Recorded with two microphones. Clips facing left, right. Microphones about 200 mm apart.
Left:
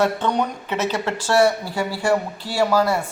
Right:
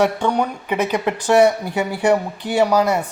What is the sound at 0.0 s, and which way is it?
Speech, 10° right (ahead or behind).